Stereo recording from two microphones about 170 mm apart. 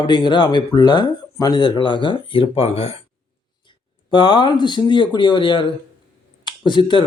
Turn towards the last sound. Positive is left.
turn(degrees=30)  # may be behind; listen again after turning